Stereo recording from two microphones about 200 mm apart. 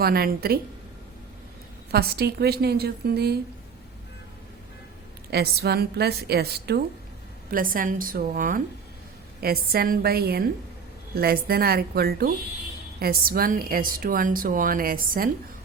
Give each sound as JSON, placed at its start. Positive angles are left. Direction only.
{"t": 0.0, "sound": "a woman's voice", "side_deg": -50}
{"t": 1.9, "sound": "a woman's voice", "side_deg": -50}
{"t": 5.3, "sound": "a woman's voice", "side_deg": -55}